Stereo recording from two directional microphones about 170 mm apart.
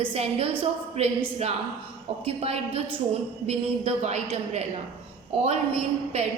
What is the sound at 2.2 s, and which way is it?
A woman's voice, 35° right (ahead or behind).